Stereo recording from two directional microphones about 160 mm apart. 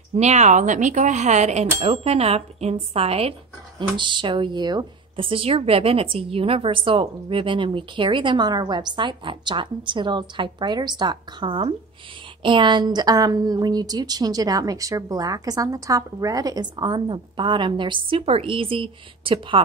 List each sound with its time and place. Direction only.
0.1 s a woman's voice: 45° right (ahead or behind)